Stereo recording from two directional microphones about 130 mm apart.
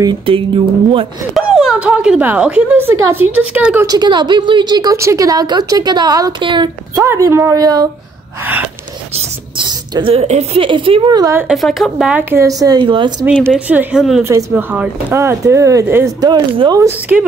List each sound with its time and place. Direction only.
0.2 s speech: 45° right (ahead or behind)
1.3 s speech: 5° right (ahead or behind)
3.8 s a woman's voice: 30° right (ahead or behind)
7.1 s a woman's voice: 20° right (ahead or behind)
9.6 s a sound: 35° right (ahead or behind)
10.1 s a woman's voice: 55° right (ahead or behind)
10.6 s speech: 40° right (ahead or behind)
11.5 s speech: centre (ahead or behind)
12.2 s speech: 15° right (ahead or behind)
12.4 s a woman's voice: 30° right (ahead or behind)
13.3 s speech: 10° right (ahead or behind)
16.2 s speech: 35° right (ahead or behind)